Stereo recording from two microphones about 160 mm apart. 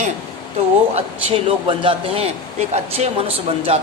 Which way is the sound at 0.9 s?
40° right (ahead or behind).